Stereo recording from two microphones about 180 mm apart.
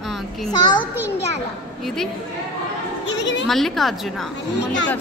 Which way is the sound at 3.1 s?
80° left.